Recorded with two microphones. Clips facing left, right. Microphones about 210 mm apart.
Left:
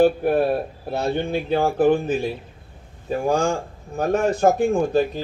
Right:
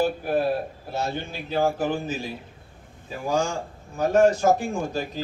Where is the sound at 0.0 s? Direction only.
60° left (ahead or behind).